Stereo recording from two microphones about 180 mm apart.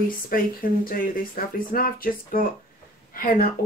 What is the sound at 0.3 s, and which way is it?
A woman's voice, 50° left (ahead or behind).